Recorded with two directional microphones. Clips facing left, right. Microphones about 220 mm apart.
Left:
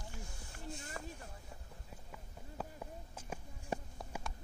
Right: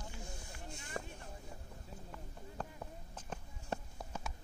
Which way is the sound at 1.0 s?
40° right (ahead or behind).